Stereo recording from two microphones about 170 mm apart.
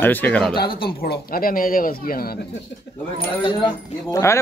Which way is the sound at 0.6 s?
60° left (ahead or behind).